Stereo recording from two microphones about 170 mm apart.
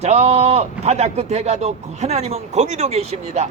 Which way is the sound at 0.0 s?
40° right (ahead or behind).